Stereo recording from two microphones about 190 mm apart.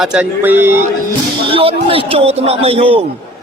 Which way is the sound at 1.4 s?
30° right (ahead or behind).